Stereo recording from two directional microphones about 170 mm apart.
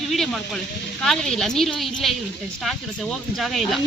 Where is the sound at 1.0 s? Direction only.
5° left (ahead or behind).